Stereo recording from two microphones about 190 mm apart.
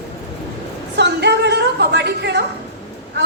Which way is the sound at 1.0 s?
65° right (ahead or behind).